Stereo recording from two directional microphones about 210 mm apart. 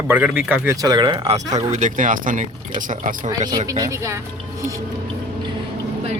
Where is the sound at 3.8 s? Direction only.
15° right (ahead or behind).